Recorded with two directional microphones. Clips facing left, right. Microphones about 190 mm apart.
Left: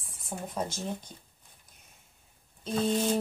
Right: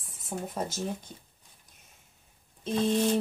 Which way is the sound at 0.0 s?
5° right (ahead or behind).